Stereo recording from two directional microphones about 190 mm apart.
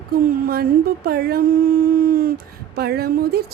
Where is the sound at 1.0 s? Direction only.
55° right (ahead or behind).